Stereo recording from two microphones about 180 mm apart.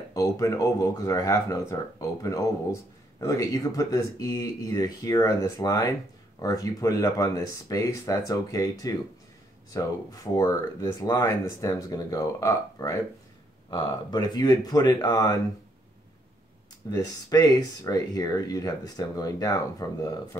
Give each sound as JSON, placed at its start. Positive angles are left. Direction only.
{"t": 0.1, "sound": "speech", "side_deg": 20}
{"t": 16.9, "sound": "speech", "side_deg": 20}